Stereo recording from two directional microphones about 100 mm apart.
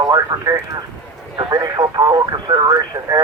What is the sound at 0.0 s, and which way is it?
Speech, 40° right (ahead or behind).